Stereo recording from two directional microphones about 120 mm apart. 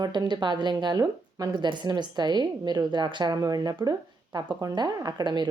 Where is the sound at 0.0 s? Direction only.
35° right (ahead or behind).